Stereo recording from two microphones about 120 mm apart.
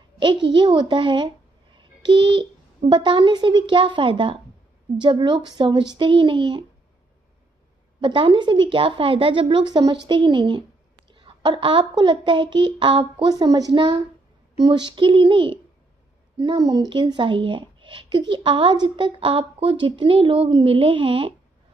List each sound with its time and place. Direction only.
0.2 s a child's voice: 45° right (ahead or behind)
8.0 s speech: 40° right (ahead or behind)
13.3 s a child's voice: 35° right (ahead or behind)